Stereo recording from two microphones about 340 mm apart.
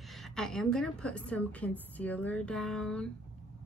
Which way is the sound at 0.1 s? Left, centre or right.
Centre.